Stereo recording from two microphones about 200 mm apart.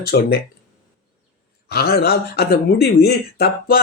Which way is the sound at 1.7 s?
50° left (ahead or behind).